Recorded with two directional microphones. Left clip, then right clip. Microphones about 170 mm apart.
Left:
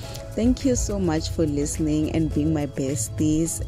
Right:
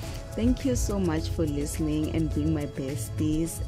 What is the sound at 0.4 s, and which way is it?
Speech, 15° left (ahead or behind).